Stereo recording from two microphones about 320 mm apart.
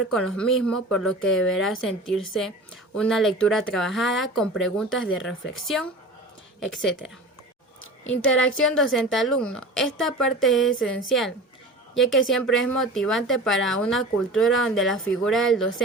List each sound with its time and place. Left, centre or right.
0.1 s a woman's voice: centre
4.9 s speech: left
5.6 s a woman's voice: centre
8.0 s speech: left
8.3 s a woman's voice: centre